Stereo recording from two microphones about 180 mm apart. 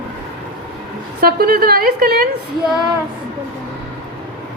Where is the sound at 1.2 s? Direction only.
55° right (ahead or behind).